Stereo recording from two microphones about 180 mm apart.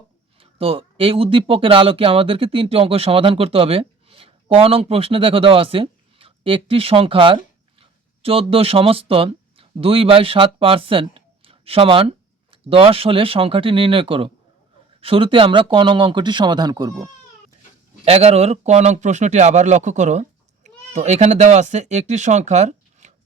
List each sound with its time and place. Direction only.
0.3 s speech: 30° right (ahead or behind)
18.0 s speech: 35° right (ahead or behind)